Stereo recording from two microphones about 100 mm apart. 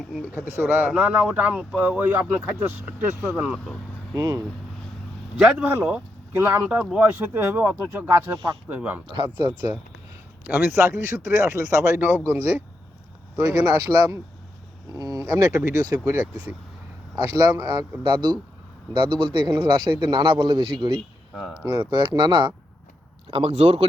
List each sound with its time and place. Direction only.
0.2 s speech: 25° right (ahead or behind)
4.1 s speech: 35° right (ahead or behind)
5.4 s speech: 15° right (ahead or behind)
9.1 s speech: 50° right (ahead or behind)
10.4 s speech: 20° right (ahead or behind)
13.3 s speech: 35° right (ahead or behind)
16.3 s speech: 15° right (ahead or behind)
17.2 s speech: 40° right (ahead or behind)
18.0 s a man's voice: 55° right (ahead or behind)
21.6 s speech: 40° right (ahead or behind)
23.3 s speech: 80° right